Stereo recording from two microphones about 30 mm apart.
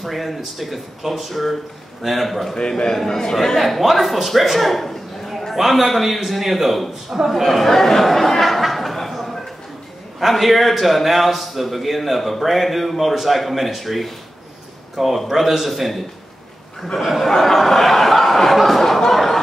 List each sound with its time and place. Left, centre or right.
0.0 s a man's voice: centre
3.1 s speech: centre
3.3 s a man's voice: centre
7.4 s a sound: centre
10.2 s a man's voice: centre
17.0 s a man's voice: centre
17.4 s a man's voice: centre